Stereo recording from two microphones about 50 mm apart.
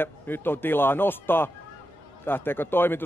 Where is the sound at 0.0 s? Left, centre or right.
Left.